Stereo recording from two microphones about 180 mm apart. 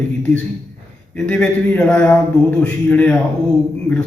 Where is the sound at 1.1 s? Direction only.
5° left (ahead or behind).